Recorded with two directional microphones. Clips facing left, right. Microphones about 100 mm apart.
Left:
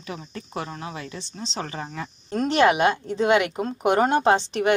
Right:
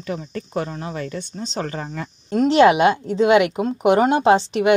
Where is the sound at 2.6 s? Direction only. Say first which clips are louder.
Right 4 dB; 25° right (ahead or behind).